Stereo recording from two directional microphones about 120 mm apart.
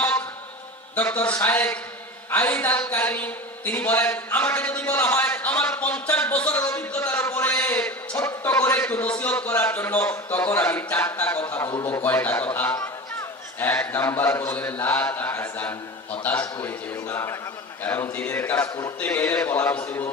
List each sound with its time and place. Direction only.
0.9 s a man's voice: 15° left (ahead or behind)
6.7 s a sound: 15° left (ahead or behind)
11.8 s a man's voice: 15° left (ahead or behind)